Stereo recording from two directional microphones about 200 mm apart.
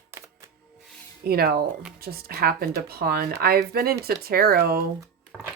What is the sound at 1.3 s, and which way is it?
Speech, 50° right (ahead or behind).